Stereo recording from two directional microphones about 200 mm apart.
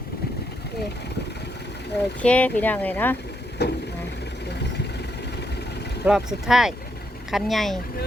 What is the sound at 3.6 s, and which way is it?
Speech, 55° left (ahead or behind).